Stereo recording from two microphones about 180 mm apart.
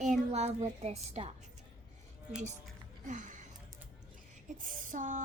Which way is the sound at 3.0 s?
45° right (ahead or behind).